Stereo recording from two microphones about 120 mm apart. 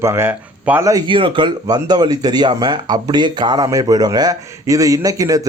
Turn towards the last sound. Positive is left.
turn(degrees=-30)  # may be behind; listen again after turning